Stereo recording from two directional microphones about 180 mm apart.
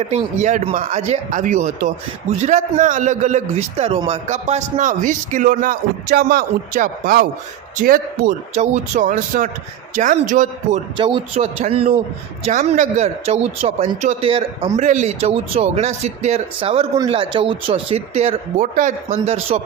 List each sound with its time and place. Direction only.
0.1 s a man's voice: 40° right (ahead or behind)
10.9 s speech: 30° right (ahead or behind)
12.5 s speech: 45° right (ahead or behind)